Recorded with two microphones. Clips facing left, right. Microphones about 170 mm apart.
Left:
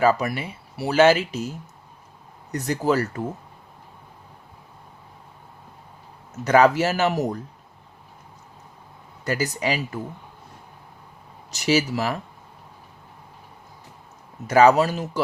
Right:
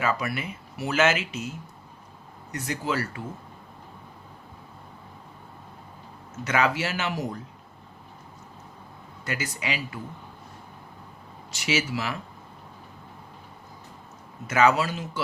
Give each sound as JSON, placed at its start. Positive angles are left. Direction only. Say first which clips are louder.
{"t": 0.0, "sound": "speech", "louder": "left 7 dB", "side_deg": 40}
{"t": 6.4, "sound": "speech", "louder": "left 8 dB", "side_deg": 40}
{"t": 9.2, "sound": "speech", "louder": "left 7 dB", "side_deg": 40}
{"t": 11.5, "sound": "speech", "louder": "left 6 dB", "side_deg": 40}
{"t": 14.4, "sound": "speech", "louder": "left 6 dB", "side_deg": 35}